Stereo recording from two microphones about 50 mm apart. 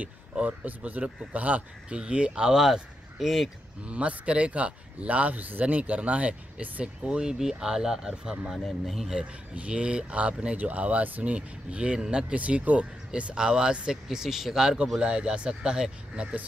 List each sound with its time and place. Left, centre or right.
0.0 s speech: right; by 2.6 s centre
2.6 s speech: centre
3.8 s speech: right
8.6 s speech: centre
9.1 s speech: right
12.4 s speech: right; by 14.8 s centre
15.0 s speech: right